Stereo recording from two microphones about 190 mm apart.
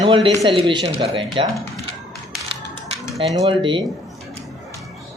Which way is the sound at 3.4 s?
25° right (ahead or behind).